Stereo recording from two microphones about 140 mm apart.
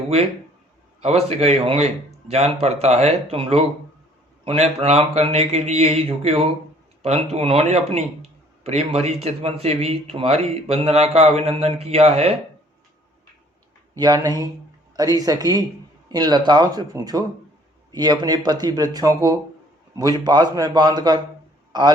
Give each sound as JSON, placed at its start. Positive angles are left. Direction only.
{"t": 1.0, "sound": "a man's voice", "side_deg": -50}
{"t": 13.9, "sound": "speech", "side_deg": -25}